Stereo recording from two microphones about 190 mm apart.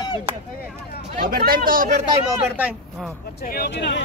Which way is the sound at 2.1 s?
10° right (ahead or behind).